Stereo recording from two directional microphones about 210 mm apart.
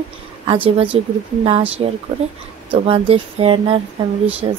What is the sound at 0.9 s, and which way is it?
Speech, 25° right (ahead or behind).